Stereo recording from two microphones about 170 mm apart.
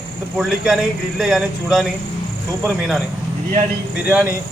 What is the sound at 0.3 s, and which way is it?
A man's voice, centre (ahead or behind).